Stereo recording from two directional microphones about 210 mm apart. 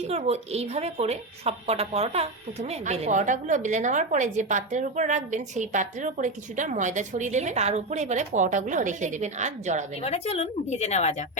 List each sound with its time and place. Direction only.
0.1 s a woman's voice: 30° right (ahead or behind)
10.0 s a woman's voice: 30° left (ahead or behind)